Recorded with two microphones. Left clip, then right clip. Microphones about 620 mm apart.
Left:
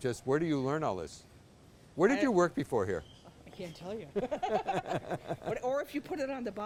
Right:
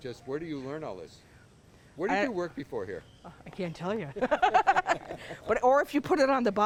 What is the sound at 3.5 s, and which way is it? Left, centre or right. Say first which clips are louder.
Speech: right 8 dB; right.